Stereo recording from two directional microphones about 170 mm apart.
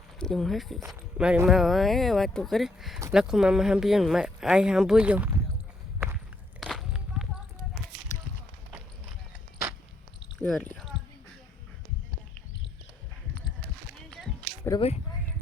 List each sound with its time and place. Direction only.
0.2 s speech: 5° left (ahead or behind)
6.6 s walk: centre (ahead or behind)
10.3 s a sound: centre (ahead or behind)
13.9 s walk: centre (ahead or behind)
14.7 s speech: 20° left (ahead or behind)